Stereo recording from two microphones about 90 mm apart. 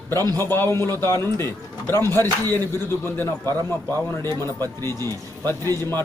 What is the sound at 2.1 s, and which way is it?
Speech, 40° right (ahead or behind).